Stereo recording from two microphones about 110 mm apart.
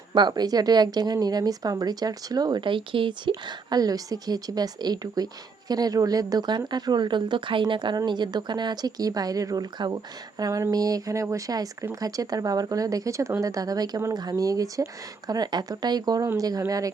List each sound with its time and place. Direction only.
0.1 s a woman's voice: 40° right (ahead or behind)